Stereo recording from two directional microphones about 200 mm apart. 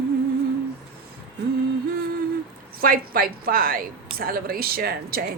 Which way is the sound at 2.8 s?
45° right (ahead or behind).